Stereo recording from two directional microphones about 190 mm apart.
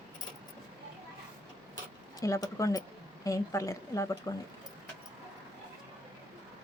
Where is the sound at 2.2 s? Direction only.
15° left (ahead or behind).